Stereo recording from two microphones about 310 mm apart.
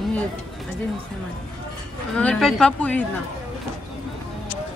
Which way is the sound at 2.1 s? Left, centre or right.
Centre.